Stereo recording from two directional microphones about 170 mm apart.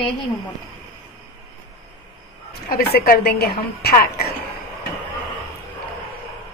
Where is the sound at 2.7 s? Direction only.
60° left (ahead or behind).